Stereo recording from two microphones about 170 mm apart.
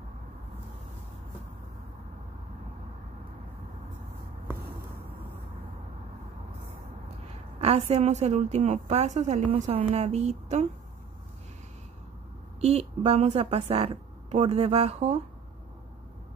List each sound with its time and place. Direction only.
7.6 s a woman's voice: 40° right (ahead or behind)
12.5 s a woman's voice: 40° right (ahead or behind)